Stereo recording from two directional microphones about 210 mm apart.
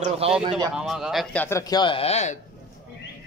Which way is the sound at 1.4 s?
15° left (ahead or behind).